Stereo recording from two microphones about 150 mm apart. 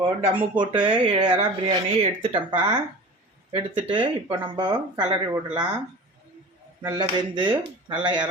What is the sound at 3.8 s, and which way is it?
A man's voice, 30° right (ahead or behind).